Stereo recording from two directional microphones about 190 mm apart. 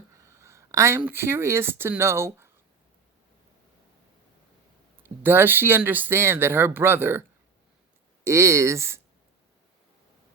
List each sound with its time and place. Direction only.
0.2 s speech: 15° right (ahead or behind)
5.0 s speech: 10° right (ahead or behind)